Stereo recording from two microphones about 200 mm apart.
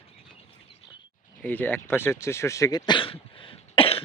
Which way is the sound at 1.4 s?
10° left (ahead or behind).